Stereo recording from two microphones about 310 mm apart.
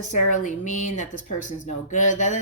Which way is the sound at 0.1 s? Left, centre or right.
Left.